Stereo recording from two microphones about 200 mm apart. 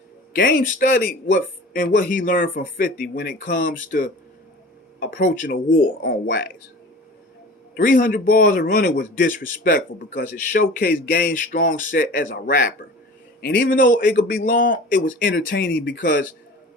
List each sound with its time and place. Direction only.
0.3 s a man's voice: 45° left (ahead or behind)
7.8 s a man's voice: 45° left (ahead or behind)